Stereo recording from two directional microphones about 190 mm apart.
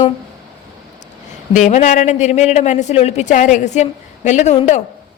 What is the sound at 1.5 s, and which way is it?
A woman's voice, 40° left (ahead or behind).